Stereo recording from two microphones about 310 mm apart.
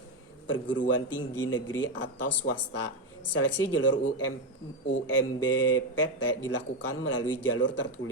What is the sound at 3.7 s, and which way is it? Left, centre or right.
Speech, left.